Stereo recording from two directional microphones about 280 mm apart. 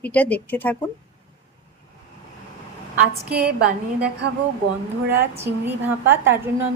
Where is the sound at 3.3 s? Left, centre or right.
Right.